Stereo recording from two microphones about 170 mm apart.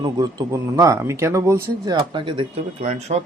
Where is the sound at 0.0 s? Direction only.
25° right (ahead or behind).